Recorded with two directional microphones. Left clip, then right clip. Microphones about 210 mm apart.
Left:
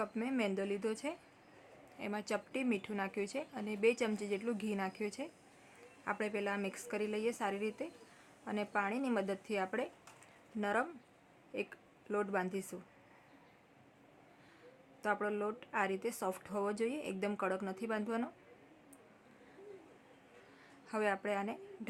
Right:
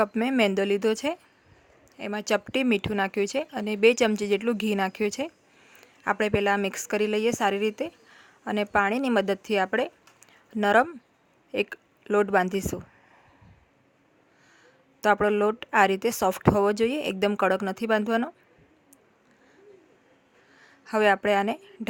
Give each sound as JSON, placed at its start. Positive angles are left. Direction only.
{"t": 0.0, "sound": "a woman's voice", "side_deg": -45}
{"t": 15.0, "sound": "a woman's voice", "side_deg": -50}
{"t": 20.6, "sound": "a woman's voice", "side_deg": -40}